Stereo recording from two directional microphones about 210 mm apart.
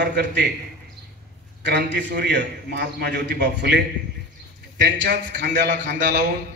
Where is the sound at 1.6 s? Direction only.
55° right (ahead or behind).